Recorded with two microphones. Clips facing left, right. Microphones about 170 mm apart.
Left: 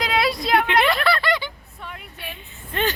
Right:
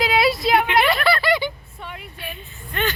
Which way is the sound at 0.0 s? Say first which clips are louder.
Right 3 dB; 5° right (ahead or behind).